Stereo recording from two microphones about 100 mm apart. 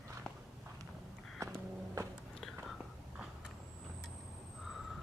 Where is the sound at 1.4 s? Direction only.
35° right (ahead or behind).